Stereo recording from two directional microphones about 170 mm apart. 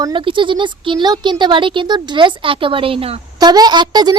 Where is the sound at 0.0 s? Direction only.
30° right (ahead or behind).